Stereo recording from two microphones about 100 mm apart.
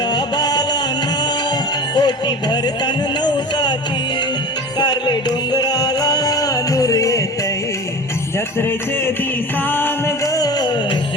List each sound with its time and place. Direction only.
0.3 s music: 45° left (ahead or behind)
2.0 s speech: 45° left (ahead or behind)
4.8 s music: 45° left (ahead or behind)
10.3 s music: 40° left (ahead or behind)